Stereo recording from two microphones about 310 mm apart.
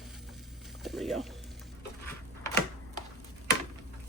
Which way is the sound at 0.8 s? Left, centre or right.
Centre.